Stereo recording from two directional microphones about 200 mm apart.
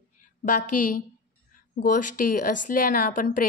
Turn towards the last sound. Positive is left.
turn(degrees=40)  # may be behind; listen again after turning